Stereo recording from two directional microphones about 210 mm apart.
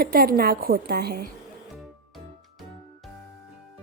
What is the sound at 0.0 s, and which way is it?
A woman's voice, 45° right (ahead or behind).